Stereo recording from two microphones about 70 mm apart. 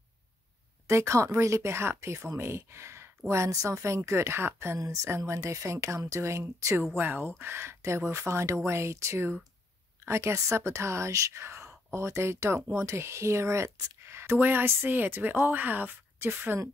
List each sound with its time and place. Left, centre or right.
0.8 s speech: right
4.7 s speech: right
7.0 s speech: right